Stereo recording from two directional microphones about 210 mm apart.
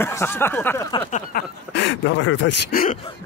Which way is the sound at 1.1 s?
40° left (ahead or behind).